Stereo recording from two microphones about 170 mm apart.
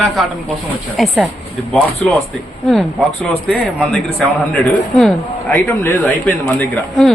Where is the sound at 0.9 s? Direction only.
Centre (ahead or behind).